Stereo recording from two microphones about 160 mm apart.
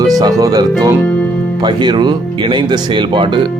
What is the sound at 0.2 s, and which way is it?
Speech, 25° right (ahead or behind).